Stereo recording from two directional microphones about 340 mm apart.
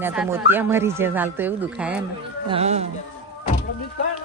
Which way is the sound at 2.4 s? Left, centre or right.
Centre.